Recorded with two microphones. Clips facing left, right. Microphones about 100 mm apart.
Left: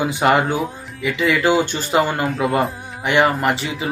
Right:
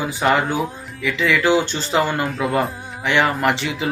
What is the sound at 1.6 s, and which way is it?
Speech, 10° left (ahead or behind).